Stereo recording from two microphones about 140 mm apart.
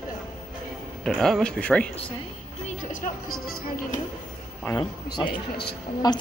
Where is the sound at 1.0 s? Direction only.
Centre (ahead or behind).